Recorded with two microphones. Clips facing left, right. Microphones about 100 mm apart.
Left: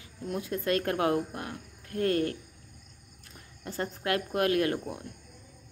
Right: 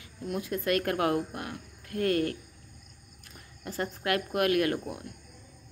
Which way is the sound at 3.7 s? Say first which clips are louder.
Even; 25° left (ahead or behind).